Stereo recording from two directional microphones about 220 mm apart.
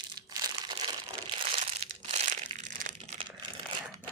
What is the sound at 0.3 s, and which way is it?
Crumpling, 15° right (ahead or behind).